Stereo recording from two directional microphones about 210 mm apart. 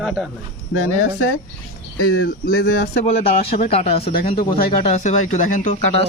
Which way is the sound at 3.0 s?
30° left (ahead or behind).